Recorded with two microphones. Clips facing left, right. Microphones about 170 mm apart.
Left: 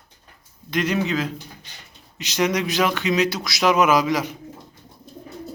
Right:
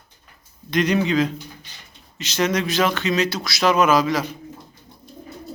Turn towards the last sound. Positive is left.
turn(degrees=15)  # may be behind; listen again after turning